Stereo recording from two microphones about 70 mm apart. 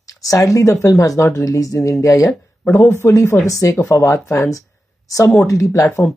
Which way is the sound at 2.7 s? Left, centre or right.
Left.